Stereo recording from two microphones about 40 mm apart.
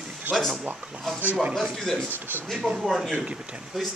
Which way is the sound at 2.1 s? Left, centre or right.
Right.